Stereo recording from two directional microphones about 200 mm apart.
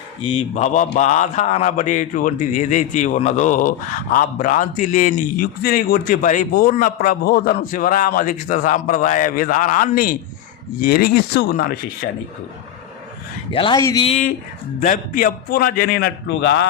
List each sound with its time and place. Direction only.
0.2 s a man's voice: 30° left (ahead or behind); by 11.7 s 45° left (ahead or behind)
13.5 s a man's voice: 25° left (ahead or behind)
13.7 s speech: 15° left (ahead or behind)
14.0 s a man's voice: 30° left (ahead or behind)
14.8 s a man's voice: 45° left (ahead or behind); by 16.6 s 60° left (ahead or behind)